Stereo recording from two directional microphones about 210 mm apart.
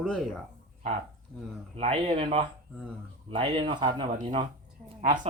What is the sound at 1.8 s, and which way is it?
Speech, 30° right (ahead or behind).